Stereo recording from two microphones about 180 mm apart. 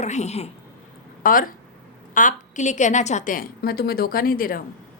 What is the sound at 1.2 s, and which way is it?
A woman's voice, 50° left (ahead or behind).